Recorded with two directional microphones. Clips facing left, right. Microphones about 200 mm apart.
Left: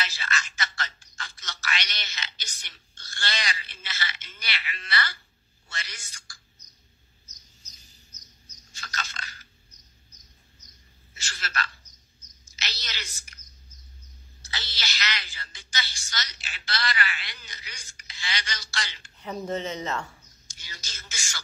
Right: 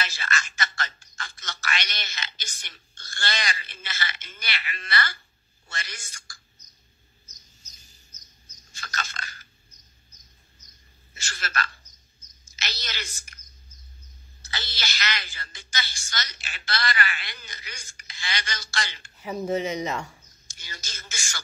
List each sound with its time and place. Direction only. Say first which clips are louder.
0.0 s speech: right 2 dB; 50° right (ahead or behind)
7.6 s bird: left 4 dB; 45° right (ahead or behind)
8.1 s a sound: left 2 dB; 90° right
8.7 s a sound: right 2 dB; 50° right (ahead or behind)
11.1 s speech: right 2 dB; 50° right (ahead or behind)
12.2 s a sound: right 2 dB; 50° right (ahead or behind)
14.4 s speech: right 3 dB; 50° right (ahead or behind)
19.4 s speech: right 5 dB; 10° right (ahead or behind)
20.2 s speech: right 3 dB; 50° right (ahead or behind)